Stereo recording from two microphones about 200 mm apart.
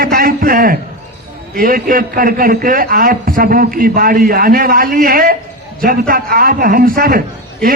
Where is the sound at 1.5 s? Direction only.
45° right (ahead or behind).